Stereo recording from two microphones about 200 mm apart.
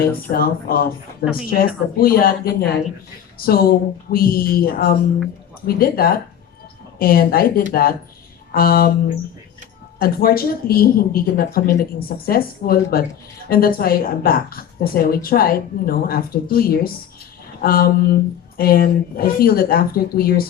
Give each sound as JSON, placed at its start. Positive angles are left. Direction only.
{"t": 0.3, "sound": "a woman's voice", "side_deg": 50}
{"t": 10.0, "sound": "a woman's voice", "side_deg": 50}